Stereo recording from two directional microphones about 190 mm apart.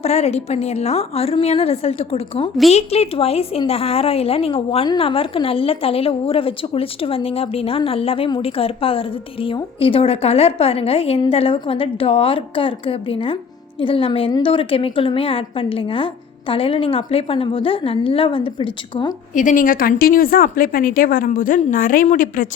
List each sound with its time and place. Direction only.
0.0 s a woman's voice: 35° left (ahead or behind)
19.3 s a woman's voice: 40° left (ahead or behind)